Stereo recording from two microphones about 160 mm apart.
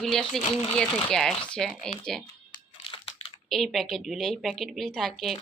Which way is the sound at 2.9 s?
35° left (ahead or behind).